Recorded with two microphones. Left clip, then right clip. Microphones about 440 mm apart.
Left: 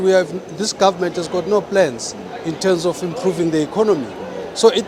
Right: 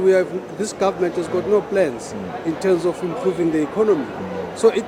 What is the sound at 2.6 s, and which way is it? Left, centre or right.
Speech, left.